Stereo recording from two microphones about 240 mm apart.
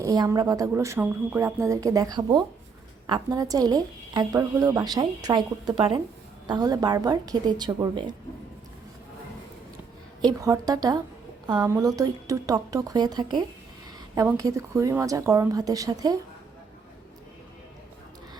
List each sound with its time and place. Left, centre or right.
0.0 s a woman's voice: centre
10.2 s a woman's voice: centre